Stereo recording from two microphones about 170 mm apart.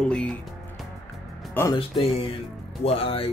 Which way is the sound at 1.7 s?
30° left (ahead or behind).